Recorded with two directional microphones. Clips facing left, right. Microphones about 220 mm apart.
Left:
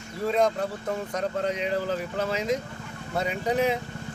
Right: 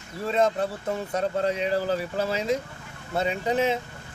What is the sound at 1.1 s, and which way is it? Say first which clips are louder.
Speech: right 4 dB; 30° right (ahead or behind).